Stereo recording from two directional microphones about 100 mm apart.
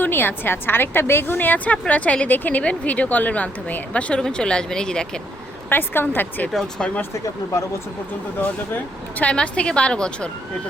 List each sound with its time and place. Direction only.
0.0 s a woman's voice: 20° left (ahead or behind)
5.6 s a woman's voice: 20° left (ahead or behind)
6.5 s a woman's voice: 5° left (ahead or behind)
8.4 s a woman's voice: 20° left (ahead or behind)